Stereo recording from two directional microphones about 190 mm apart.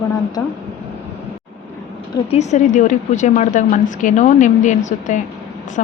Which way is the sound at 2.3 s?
35° left (ahead or behind).